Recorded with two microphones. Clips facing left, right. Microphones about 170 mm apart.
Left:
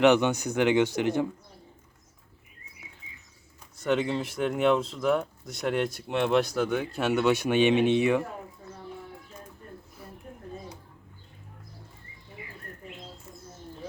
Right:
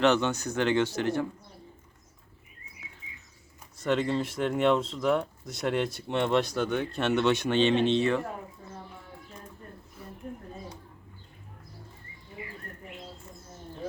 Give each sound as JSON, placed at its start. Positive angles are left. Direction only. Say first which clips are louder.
{"t": 0.0, "sound": "speech", "louder": "left 3 dB", "side_deg": 15}
{"t": 3.0, "sound": "bird", "louder": "right 1 dB", "side_deg": -15}
{"t": 3.8, "sound": "speech", "louder": "even", "side_deg": 0}